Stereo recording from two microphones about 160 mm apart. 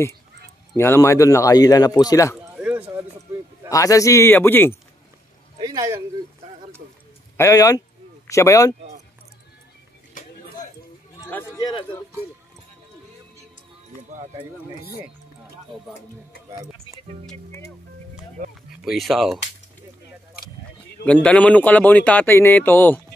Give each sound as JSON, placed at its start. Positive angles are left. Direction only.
{"t": 0.7, "sound": "a man's voice", "side_deg": 15}
{"t": 2.5, "sound": "a sound", "side_deg": -10}
{"t": 3.7, "sound": "speech", "side_deg": 20}
{"t": 5.6, "sound": "a sound", "side_deg": -25}
{"t": 7.3, "sound": "a man's voice", "side_deg": 20}
{"t": 10.2, "sound": "chatter", "side_deg": 55}
{"t": 11.1, "sound": "a sound", "side_deg": 15}
{"t": 18.9, "sound": "speech", "side_deg": 0}
{"t": 21.0, "sound": "speech", "side_deg": 5}